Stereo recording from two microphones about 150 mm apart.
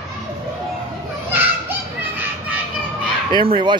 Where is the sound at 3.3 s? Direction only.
35° right (ahead or behind).